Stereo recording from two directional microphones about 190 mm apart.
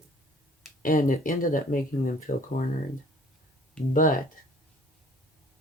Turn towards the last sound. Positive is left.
turn(degrees=45)  # may be behind; listen again after turning